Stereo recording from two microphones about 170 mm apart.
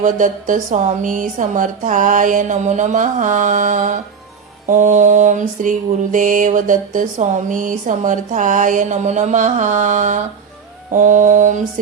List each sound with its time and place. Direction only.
0.0 s mantra: 50° right (ahead or behind)